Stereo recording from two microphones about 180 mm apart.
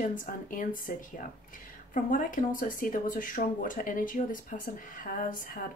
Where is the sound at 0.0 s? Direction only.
50° left (ahead or behind).